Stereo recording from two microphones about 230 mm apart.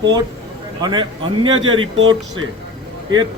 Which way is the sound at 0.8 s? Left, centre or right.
Centre.